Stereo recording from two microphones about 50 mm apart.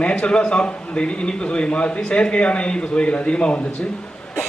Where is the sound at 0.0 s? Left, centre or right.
Left.